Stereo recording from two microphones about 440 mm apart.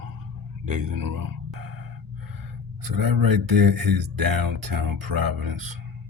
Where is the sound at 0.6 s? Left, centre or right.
Right.